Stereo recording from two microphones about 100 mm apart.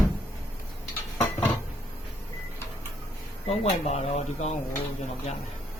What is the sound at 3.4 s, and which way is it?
Speech, 90° left.